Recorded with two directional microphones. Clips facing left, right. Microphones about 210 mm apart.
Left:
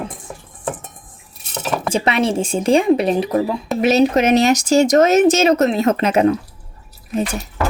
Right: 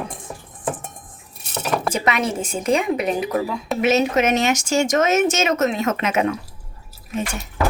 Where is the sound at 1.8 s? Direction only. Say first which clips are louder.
Left 7 dB; 30° left (ahead or behind).